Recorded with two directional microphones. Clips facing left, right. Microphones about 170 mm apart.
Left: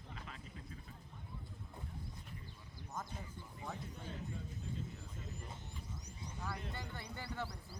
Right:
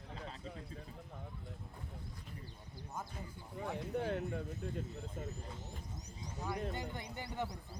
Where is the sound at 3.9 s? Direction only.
70° right (ahead or behind).